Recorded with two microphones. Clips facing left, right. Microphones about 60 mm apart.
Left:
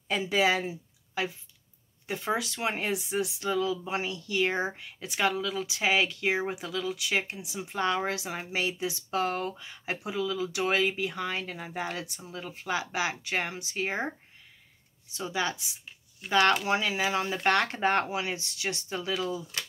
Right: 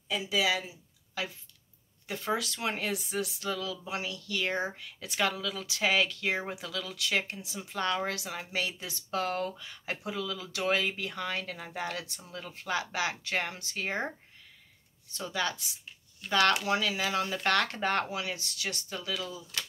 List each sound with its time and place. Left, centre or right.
0.1 s speech: left
1.2 s speech: left
15.1 s speech: centre; by 19.4 s left